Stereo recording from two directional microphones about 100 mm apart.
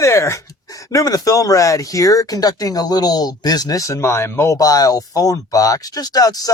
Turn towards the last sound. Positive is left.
turn(degrees=40)  # may be behind; listen again after turning